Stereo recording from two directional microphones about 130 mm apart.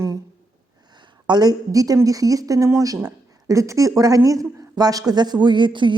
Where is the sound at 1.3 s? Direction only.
30° right (ahead or behind).